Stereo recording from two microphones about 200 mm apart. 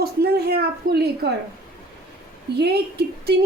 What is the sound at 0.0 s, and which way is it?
A woman's voice, 50° right (ahead or behind).